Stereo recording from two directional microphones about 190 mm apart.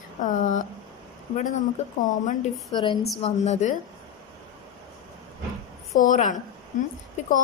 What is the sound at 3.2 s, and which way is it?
Speech, 35° left (ahead or behind).